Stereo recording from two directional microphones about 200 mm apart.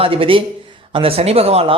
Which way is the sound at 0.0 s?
25° right (ahead or behind).